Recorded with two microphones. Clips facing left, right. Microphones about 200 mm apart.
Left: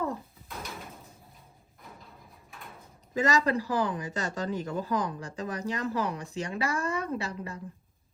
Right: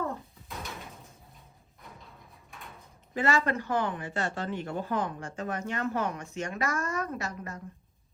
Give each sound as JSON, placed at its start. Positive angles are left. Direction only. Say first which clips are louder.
{"t": 0.4, "sound": "door", "louder": "right 1 dB", "side_deg": 0}
{"t": 2.5, "sound": "sliding door", "louder": "even", "side_deg": 0}
{"t": 3.4, "sound": "speech", "louder": "left 2 dB", "side_deg": 35}